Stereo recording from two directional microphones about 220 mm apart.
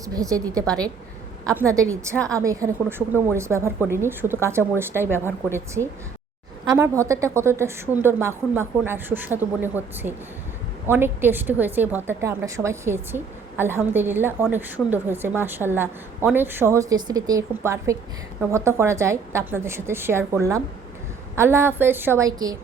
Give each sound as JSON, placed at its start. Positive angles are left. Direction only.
{"t": 0.0, "sound": "a woman's voice", "side_deg": -15}
{"t": 1.5, "sound": "a woman's voice", "side_deg": -15}